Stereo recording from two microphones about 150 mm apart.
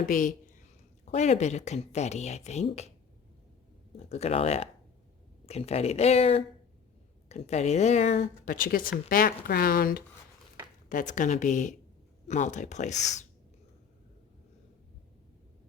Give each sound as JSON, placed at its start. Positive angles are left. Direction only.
{"t": 0.0, "sound": "speech", "side_deg": 60}
{"t": 1.0, "sound": "speech", "side_deg": 50}
{"t": 3.9, "sound": "speech", "side_deg": 45}
{"t": 10.8, "sound": "speech", "side_deg": 60}